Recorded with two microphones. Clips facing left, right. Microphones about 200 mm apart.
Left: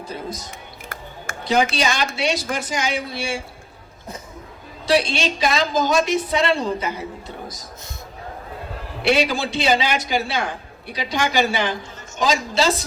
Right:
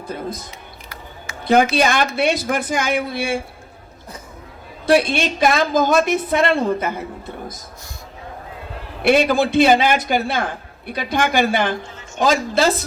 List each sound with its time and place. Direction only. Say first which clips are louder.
0.1 s a woman's voice: right 4 dB; 55° right (ahead or behind)
1.3 s a sound: left 2 dB; 50° left (ahead or behind)
1.7 s a woman's voice: right 5 dB; 55° right (ahead or behind)
4.9 s a woman's voice: right 3 dB; 55° right (ahead or behind)
9.0 s a man's voice: right 4 dB; 55° right (ahead or behind)